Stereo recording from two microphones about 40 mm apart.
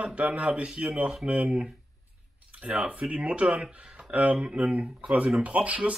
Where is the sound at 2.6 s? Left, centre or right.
Right.